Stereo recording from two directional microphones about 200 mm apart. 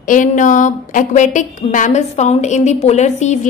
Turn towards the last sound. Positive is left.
turn(degrees=35)  # may be behind; listen again after turning